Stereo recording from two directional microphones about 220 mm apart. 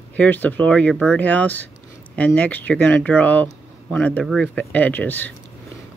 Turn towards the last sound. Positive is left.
turn(degrees=10)  # may be behind; listen again after turning